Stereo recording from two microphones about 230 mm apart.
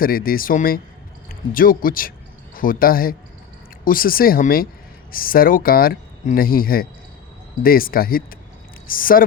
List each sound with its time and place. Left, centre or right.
0.0 s speech: left